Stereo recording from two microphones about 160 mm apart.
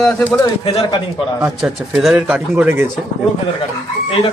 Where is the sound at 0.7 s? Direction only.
35° left (ahead or behind).